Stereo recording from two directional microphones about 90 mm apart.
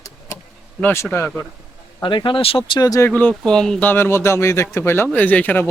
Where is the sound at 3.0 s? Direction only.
20° left (ahead or behind).